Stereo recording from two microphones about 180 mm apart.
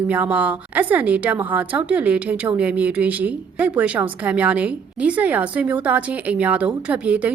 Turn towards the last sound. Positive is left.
turn(degrees=-10)  # may be behind; listen again after turning